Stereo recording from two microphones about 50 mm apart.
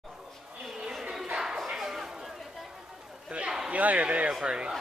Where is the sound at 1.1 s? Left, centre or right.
Centre.